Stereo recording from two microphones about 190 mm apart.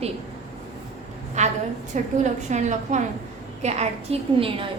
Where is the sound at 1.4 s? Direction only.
35° right (ahead or behind).